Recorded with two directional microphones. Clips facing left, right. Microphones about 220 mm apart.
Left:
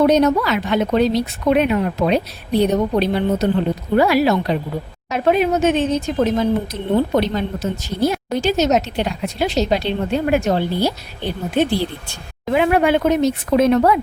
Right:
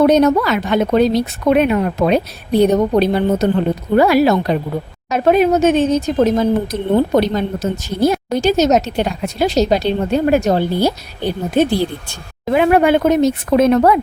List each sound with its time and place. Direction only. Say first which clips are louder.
0.0 s speech: right 3 dB; 50° right (ahead or behind)